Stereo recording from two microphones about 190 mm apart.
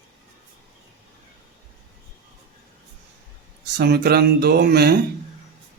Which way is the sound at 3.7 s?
60° right (ahead or behind).